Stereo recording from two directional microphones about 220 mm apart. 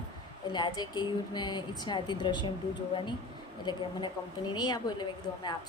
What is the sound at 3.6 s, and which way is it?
A woman's voice, 20° left (ahead or behind).